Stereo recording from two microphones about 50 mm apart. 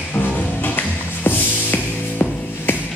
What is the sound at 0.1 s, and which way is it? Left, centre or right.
Music, left.